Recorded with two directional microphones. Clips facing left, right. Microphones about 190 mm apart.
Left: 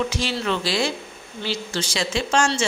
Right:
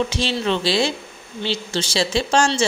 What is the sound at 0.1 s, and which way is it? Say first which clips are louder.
A woman's voice: right 3 dB; 25° right (ahead or behind).